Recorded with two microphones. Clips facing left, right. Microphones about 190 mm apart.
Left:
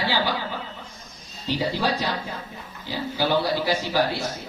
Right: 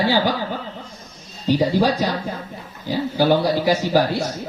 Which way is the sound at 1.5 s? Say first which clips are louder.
Right 7 dB; 45° right (ahead or behind).